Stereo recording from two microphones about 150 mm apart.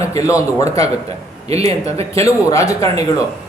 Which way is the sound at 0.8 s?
45° right (ahead or behind).